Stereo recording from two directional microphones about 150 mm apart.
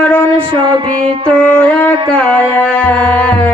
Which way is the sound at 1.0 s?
10° left (ahead or behind).